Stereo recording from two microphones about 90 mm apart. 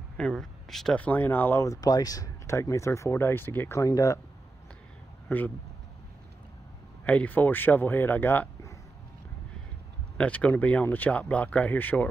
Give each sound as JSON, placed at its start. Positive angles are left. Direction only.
{"t": 0.2, "sound": "speech", "side_deg": 5}
{"t": 0.9, "sound": "speech", "side_deg": 20}
{"t": 1.6, "sound": "speech", "side_deg": 40}
{"t": 3.8, "sound": "speech", "side_deg": 35}
{"t": 5.3, "sound": "speech", "side_deg": 30}
{"t": 7.1, "sound": "speech", "side_deg": 20}
{"t": 10.1, "sound": "speech", "side_deg": 15}